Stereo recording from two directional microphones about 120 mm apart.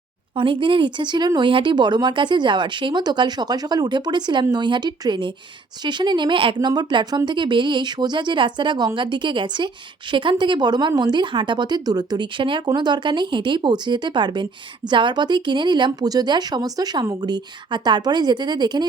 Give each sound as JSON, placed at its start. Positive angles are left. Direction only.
{"t": 0.3, "sound": "speech", "side_deg": -45}